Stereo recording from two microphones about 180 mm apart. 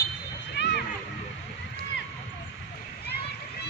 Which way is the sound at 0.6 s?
75° left (ahead or behind).